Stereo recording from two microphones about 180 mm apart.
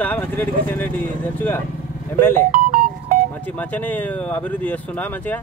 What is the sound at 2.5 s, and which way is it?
Music, 55° right (ahead or behind).